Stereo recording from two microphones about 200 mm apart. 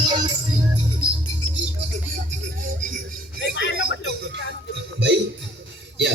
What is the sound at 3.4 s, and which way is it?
Music, 60° left (ahead or behind).